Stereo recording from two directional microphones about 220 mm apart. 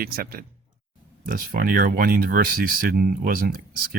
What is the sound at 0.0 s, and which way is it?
Speech, 40° right (ahead or behind).